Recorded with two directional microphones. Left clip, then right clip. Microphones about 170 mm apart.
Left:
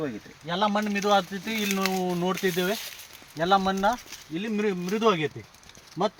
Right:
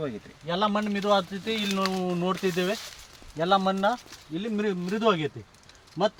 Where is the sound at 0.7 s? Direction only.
30° right (ahead or behind).